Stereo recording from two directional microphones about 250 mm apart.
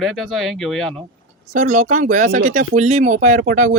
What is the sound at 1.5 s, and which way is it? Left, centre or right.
Speech, right.